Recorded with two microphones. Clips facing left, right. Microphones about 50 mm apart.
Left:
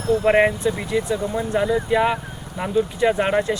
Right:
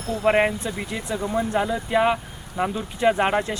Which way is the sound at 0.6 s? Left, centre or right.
Centre.